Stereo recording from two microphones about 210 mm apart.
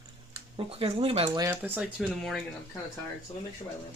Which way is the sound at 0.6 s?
25° right (ahead or behind).